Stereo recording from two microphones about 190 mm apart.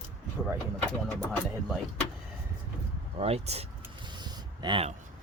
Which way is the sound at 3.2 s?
30° right (ahead or behind).